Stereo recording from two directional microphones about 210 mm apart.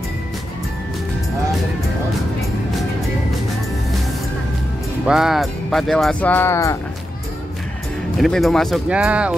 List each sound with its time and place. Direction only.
5.0 s speech: centre (ahead or behind); by 6.8 s 15° left (ahead or behind)
8.2 s speech: centre (ahead or behind)